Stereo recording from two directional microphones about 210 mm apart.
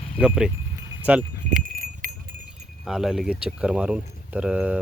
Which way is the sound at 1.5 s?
40° right (ahead or behind).